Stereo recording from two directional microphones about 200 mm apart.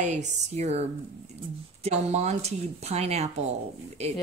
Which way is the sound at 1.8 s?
35° right (ahead or behind).